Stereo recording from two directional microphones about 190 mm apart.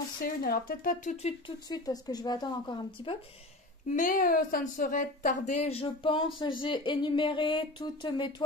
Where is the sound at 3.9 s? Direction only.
45° left (ahead or behind); by 8.5 s 25° left (ahead or behind).